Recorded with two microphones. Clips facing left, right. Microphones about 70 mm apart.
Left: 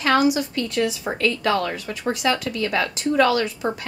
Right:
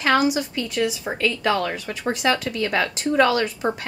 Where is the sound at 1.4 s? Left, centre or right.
Right.